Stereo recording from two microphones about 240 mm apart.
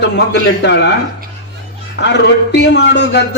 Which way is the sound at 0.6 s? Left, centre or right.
Left.